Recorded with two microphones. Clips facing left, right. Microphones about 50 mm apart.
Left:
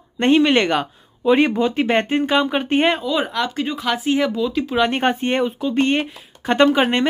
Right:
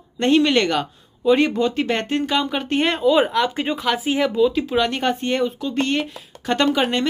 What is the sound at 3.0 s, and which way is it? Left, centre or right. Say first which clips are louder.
Speech: right 4 dB; centre.